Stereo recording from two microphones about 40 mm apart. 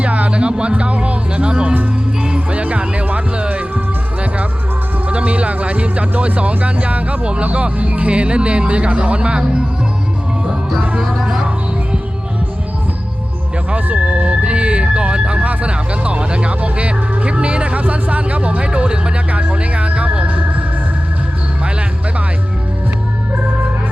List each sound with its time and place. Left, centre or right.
0.0 s speech: right
2.2 s music: right
2.6 s speech: right
5.0 s speech: right
11.0 s music: centre
13.7 s speech: right